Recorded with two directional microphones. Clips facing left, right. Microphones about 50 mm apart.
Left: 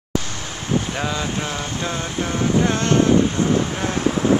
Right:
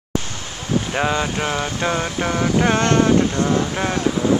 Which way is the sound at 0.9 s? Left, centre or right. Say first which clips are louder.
Right 4 dB; right.